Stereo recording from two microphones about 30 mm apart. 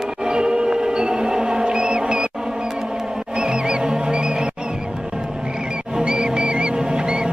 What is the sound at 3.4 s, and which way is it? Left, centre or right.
Music, right.